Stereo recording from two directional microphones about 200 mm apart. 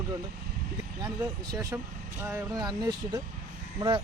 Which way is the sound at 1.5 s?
15° right (ahead or behind).